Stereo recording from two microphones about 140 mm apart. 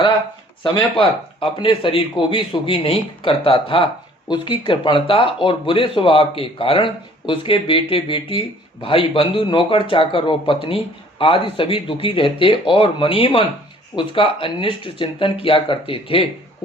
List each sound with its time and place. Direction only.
0.9 s speech: 35° left (ahead or behind)